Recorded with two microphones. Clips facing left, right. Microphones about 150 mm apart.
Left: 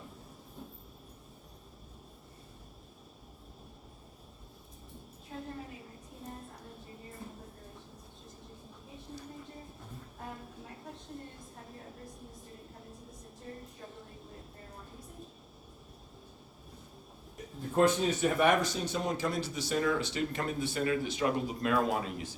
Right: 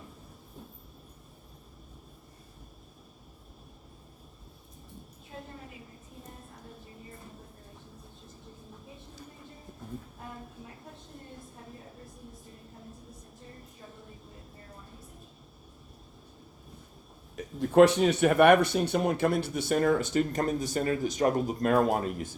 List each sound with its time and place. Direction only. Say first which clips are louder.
17.3 s speech: right 9 dB; 80° right; by 22.4 s 50° right (ahead or behind)